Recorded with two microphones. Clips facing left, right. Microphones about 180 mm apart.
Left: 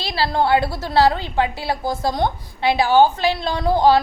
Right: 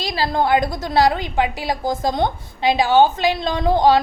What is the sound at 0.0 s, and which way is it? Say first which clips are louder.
A woman's voice: even; 15° right (ahead or behind).